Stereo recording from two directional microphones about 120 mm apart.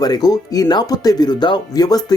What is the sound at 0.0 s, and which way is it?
Speech, 35° left (ahead or behind).